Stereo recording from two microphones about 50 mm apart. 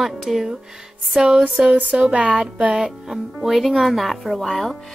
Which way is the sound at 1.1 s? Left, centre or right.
Centre.